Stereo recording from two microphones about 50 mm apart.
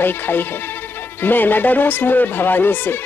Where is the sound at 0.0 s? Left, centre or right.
Left.